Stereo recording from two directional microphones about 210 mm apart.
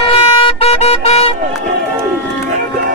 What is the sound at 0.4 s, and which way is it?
Vehicle, 25° left (ahead or behind).